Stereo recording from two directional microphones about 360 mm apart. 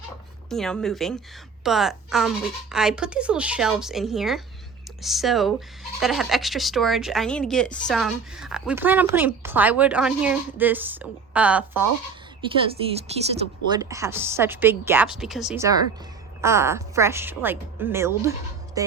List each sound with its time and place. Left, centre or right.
0.5 s speech: centre
13.1 s speech: centre